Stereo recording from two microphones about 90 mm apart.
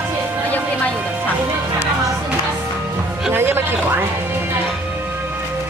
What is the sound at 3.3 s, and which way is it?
Speech, 25° right (ahead or behind).